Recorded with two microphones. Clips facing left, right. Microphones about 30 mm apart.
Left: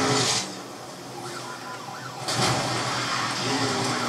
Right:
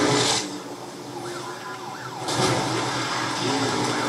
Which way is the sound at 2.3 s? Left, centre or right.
Left.